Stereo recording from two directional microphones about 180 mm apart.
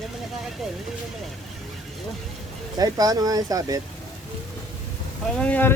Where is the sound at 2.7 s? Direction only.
20° right (ahead or behind).